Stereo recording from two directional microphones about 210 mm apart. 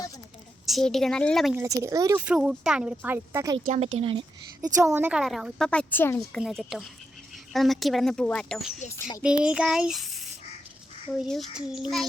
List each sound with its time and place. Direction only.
0.6 s a child's voice: centre (ahead or behind)
1.5 s speech: 15° right (ahead or behind)
2.2 s a child's voice: 5° right (ahead or behind)
3.7 s speech: 30° right (ahead or behind)
4.9 s a child's voice: 10° right (ahead or behind); by 6.4 s 10° left (ahead or behind)
6.4 s a child's voice: centre (ahead or behind)
9.0 s speech: 15° left (ahead or behind)
9.2 s a child's voice: 5° right (ahead or behind)